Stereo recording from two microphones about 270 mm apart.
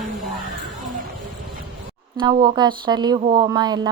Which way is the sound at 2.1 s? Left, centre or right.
Centre.